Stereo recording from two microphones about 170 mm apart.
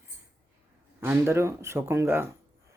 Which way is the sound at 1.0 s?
15° right (ahead or behind).